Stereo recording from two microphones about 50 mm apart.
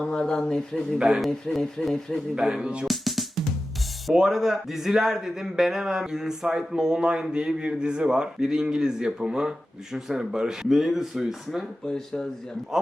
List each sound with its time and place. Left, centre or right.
0.0 s speech: centre
0.9 s a man's voice: centre
1.3 s speech: centre
2.3 s speech: centre
2.8 s music: centre
4.0 s speech: centre
11.9 s speech: centre
12.7 s speech: centre